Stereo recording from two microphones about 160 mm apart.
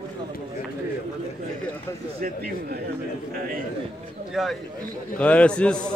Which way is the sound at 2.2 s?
75° right (ahead or behind).